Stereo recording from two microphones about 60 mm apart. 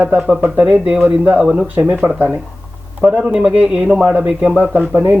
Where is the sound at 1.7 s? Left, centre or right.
Right.